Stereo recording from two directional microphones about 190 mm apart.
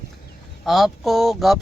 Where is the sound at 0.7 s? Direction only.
Centre (ahead or behind).